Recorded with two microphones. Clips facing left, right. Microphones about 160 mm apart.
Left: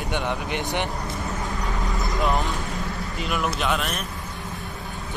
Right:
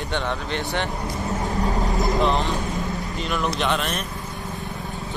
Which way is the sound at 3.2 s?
5° left (ahead or behind).